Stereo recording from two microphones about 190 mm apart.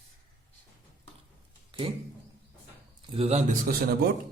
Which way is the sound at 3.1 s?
35° right (ahead or behind).